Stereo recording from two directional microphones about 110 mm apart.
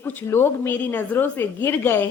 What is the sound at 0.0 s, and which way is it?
A woman's voice, 20° left (ahead or behind).